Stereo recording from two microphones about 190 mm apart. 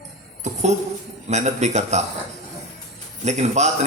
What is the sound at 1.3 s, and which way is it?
Speech, 35° right (ahead or behind).